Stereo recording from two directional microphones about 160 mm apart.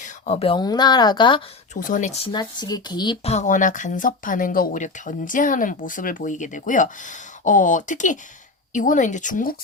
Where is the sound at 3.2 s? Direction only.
45° left (ahead or behind).